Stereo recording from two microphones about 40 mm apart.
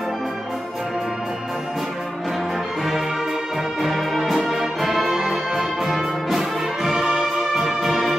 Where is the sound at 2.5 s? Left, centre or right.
Centre.